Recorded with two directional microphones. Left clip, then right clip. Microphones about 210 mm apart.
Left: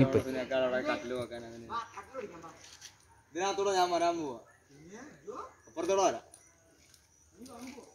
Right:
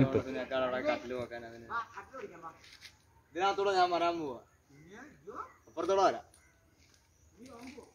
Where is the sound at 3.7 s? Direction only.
40° left (ahead or behind).